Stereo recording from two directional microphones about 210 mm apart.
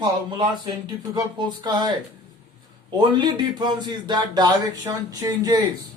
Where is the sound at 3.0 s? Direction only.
20° right (ahead or behind).